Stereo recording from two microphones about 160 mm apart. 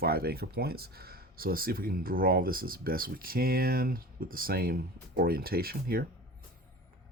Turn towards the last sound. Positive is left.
turn(degrees=-70)  # may be behind; listen again after turning